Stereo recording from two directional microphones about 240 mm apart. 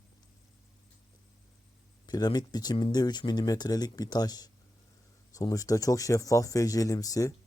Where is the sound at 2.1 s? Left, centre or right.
Centre.